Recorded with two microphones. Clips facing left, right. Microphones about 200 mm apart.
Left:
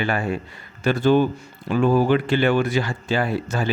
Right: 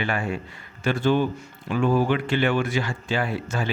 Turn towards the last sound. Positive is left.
turn(degrees=40)  # may be behind; listen again after turning